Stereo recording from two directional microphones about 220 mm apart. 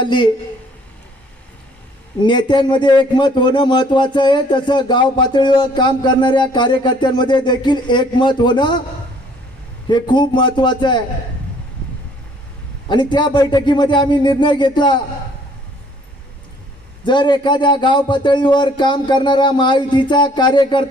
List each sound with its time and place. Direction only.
0.0 s a woman's voice: 20° left (ahead or behind)
2.2 s a man's voice: 20° left (ahead or behind)
9.9 s a man's voice: 20° left (ahead or behind)
12.9 s a man's voice: 20° left (ahead or behind)
17.1 s a man's voice: 20° left (ahead or behind)